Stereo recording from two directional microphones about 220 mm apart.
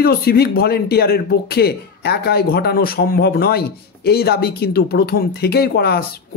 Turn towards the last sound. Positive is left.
turn(degrees=45)  # may be behind; listen again after turning